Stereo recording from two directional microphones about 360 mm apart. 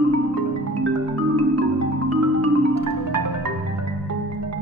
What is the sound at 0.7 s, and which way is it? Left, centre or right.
Music, right.